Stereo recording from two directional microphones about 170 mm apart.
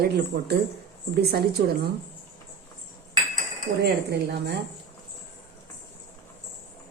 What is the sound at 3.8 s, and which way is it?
Speech, 80° right.